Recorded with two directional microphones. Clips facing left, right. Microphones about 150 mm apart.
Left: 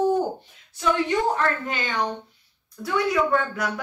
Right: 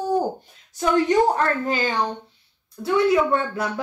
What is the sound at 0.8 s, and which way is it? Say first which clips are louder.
A woman's voice: right 5 dB; 40° right (ahead or behind).